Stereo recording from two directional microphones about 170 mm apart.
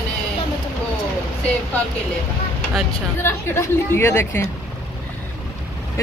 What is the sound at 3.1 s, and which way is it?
Speech, 15° left (ahead or behind).